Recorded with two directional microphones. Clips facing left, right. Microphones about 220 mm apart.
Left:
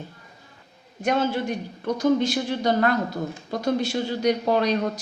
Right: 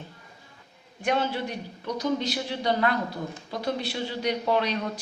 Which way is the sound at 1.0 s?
45° left (ahead or behind).